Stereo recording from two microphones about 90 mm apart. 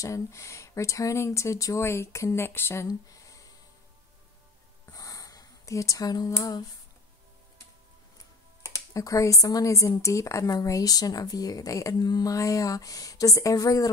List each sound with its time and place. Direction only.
0.0 s speech: 35° left (ahead or behind)
4.9 s a sound: 40° left (ahead or behind)
8.6 s speech: 40° left (ahead or behind)